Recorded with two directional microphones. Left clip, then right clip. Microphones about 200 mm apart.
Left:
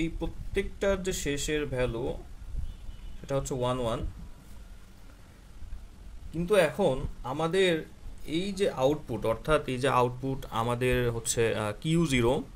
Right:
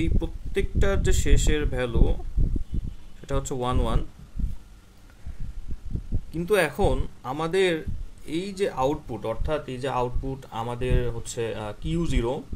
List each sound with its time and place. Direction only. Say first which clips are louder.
0.0 s speech: right 3 dB; 20° right (ahead or behind)
3.3 s speech: right 1 dB; 20° right (ahead or behind)
6.3 s speech: right 2 dB; 25° right (ahead or behind); by 9.0 s 10° right (ahead or behind)
9.1 s speech: left 2 dB; 5° left (ahead or behind)